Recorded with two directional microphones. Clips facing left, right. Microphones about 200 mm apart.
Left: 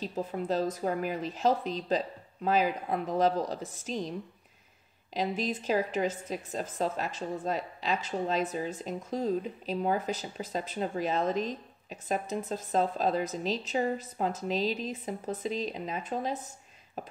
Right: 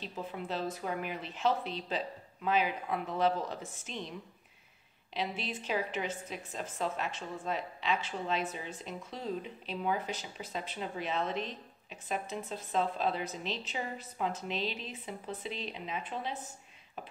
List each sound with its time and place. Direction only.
0.0 s a woman's voice: 40° left (ahead or behind)
5.1 s a woman's voice: 40° left (ahead or behind)